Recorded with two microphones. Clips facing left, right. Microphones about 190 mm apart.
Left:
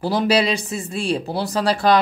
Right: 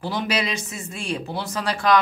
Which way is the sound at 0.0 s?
35° left (ahead or behind).